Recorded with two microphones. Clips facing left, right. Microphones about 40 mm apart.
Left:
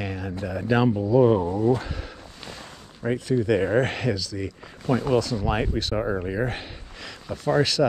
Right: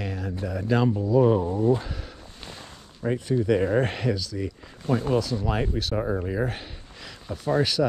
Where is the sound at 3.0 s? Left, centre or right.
Left.